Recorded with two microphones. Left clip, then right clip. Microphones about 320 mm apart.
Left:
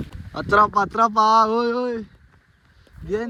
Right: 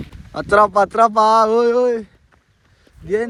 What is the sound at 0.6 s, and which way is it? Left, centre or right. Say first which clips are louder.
Speech: right 5 dB; centre.